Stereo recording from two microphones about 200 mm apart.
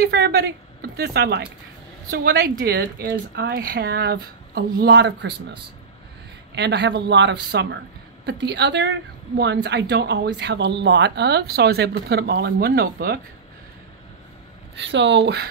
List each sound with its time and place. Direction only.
0.0 s speech: 55° right (ahead or behind)
6.5 s speech: 60° right (ahead or behind)
14.9 s speech: 65° right (ahead or behind)